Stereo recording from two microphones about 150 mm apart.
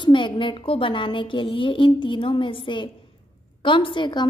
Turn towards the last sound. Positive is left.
turn(degrees=30)  # may be behind; listen again after turning